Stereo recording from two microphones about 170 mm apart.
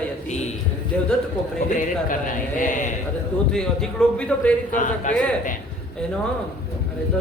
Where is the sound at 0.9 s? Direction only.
5° left (ahead or behind).